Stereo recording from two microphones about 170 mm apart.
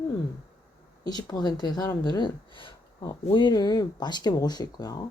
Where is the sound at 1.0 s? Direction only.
25° left (ahead or behind).